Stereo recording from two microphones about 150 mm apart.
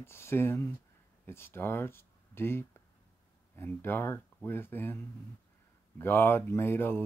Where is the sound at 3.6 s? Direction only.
15° left (ahead or behind).